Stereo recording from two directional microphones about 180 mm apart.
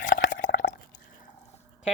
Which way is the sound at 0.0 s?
45° left (ahead or behind).